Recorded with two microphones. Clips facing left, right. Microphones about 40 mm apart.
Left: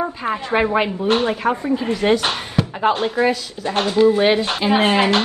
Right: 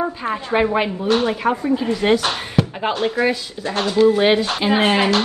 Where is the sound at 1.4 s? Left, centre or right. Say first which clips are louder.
Right 1 dB; centre.